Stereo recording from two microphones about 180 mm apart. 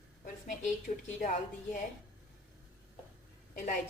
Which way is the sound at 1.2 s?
45° left (ahead or behind).